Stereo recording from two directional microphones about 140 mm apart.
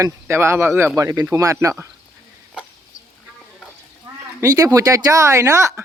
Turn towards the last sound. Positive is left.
turn(degrees=-20)  # may be behind; listen again after turning